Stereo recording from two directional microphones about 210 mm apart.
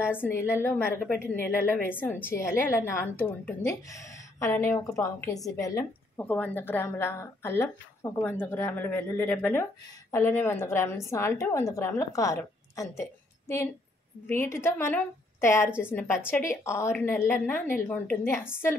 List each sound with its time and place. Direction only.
0.1 s a woman's voice: 10° left (ahead or behind)
4.4 s a woman's voice: 15° left (ahead or behind)